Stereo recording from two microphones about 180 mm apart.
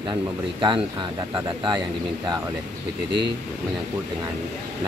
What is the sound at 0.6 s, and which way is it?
Speech, 25° right (ahead or behind).